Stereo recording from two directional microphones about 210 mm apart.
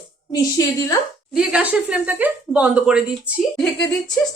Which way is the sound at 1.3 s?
5° right (ahead or behind).